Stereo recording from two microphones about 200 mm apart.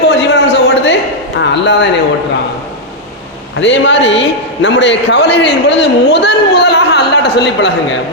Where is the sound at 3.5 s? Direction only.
65° left (ahead or behind).